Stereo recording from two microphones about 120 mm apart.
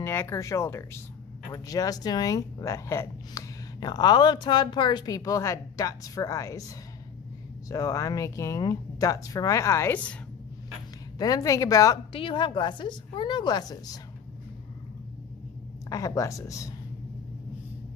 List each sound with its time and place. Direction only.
0.0 s speech: 20° left (ahead or behind)
7.6 s speech: 30° left (ahead or behind)
11.1 s speech: 30° left (ahead or behind)
12.1 s speech: 45° left (ahead or behind)
15.9 s speech: 25° left (ahead or behind)